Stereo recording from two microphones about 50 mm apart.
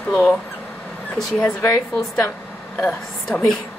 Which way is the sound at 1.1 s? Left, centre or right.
Centre.